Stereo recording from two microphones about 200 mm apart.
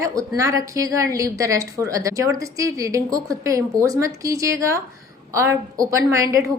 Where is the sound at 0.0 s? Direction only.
15° right (ahead or behind).